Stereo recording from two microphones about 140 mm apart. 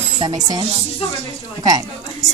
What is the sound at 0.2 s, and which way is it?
Speech, 30° right (ahead or behind).